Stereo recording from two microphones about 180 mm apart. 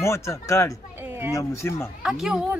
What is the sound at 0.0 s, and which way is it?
Speech, 15° left (ahead or behind).